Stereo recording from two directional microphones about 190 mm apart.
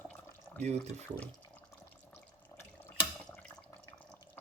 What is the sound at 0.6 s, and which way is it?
Speech, 35° right (ahead or behind).